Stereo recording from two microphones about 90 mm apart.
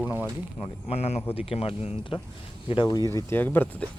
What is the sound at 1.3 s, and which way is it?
Speech, 90° left.